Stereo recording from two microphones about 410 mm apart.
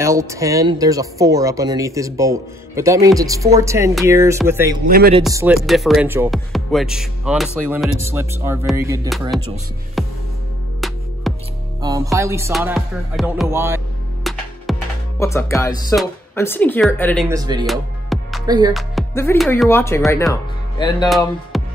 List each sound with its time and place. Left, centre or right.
0.0 s speech: centre
4.8 s speech: right
5.2 s music: centre
11.3 s music: centre
11.8 s speech: centre
14.2 s music: centre
17.4 s speech: centre
21.1 s music: centre